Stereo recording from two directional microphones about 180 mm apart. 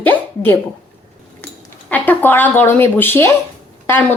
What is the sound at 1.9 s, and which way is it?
A woman's voice, 10° left (ahead or behind).